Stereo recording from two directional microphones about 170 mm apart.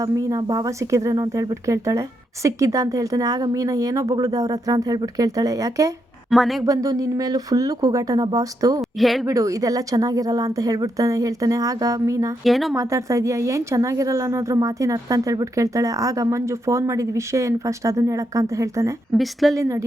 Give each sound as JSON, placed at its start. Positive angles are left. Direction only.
{"t": 0.0, "sound": "speech", "side_deg": -20}
{"t": 6.3, "sound": "a woman's voice", "side_deg": 0}
{"t": 6.7, "sound": "speech", "side_deg": -20}
{"t": 9.0, "sound": "a woman's voice", "side_deg": 0}
{"t": 9.2, "sound": "speech", "side_deg": -20}
{"t": 12.5, "sound": "a woman's voice", "side_deg": 0}
{"t": 12.7, "sound": "speech", "side_deg": -20}
{"t": 19.1, "sound": "a woman's voice", "side_deg": 0}
{"t": 19.5, "sound": "a woman's voice", "side_deg": -15}